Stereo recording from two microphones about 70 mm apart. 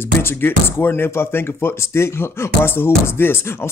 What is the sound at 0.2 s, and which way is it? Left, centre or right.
Speech, left.